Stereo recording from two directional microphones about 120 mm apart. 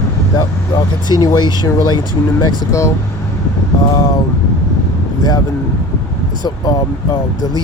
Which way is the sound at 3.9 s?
35° left (ahead or behind).